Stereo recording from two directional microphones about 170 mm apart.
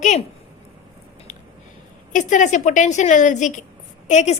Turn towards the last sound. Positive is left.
turn(degrees=45)  # may be behind; listen again after turning